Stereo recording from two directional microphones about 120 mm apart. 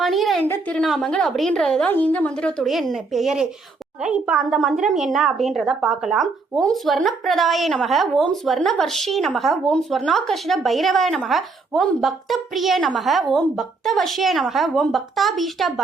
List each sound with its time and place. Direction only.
0.0 s a sound: centre (ahead or behind)
0.4 s a woman's voice: 20° left (ahead or behind)
0.8 s a woman's voice: 5° left (ahead or behind)